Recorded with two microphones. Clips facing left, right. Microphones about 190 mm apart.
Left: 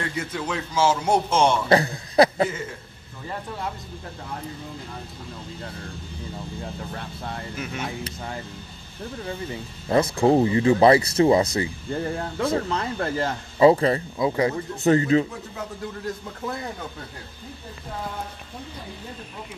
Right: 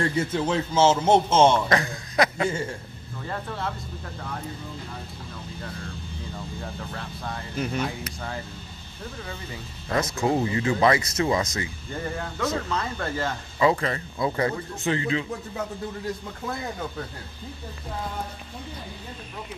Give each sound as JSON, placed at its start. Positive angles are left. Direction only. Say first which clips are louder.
{"t": 0.0, "sound": "a man's voice", "louder": "right 5 dB", "side_deg": -30}
{"t": 1.7, "sound": "speech", "louder": "left 5 dB", "side_deg": 35}
{"t": 7.5, "sound": "speech", "louder": "right 4 dB", "side_deg": -35}
{"t": 9.8, "sound": "speech", "louder": "left 6 dB", "side_deg": 30}
{"t": 14.1, "sound": "speech", "louder": "left 3 dB", "side_deg": 15}
{"t": 14.8, "sound": "speech", "louder": "left 8 dB", "side_deg": 40}